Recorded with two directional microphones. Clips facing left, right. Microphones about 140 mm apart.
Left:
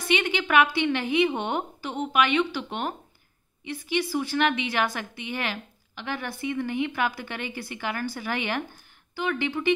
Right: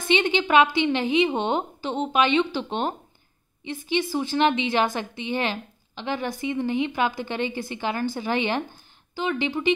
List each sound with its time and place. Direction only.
0.1 s a woman's voice: 25° right (ahead or behind)